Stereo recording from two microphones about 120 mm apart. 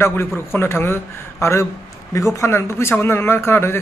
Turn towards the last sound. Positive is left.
turn(degrees=20)  # may be behind; listen again after turning